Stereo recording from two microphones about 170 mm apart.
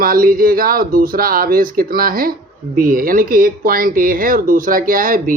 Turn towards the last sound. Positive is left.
turn(degrees=-55)  # may be behind; listen again after turning